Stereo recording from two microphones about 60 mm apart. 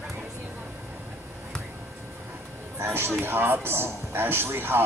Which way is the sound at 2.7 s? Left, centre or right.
Right.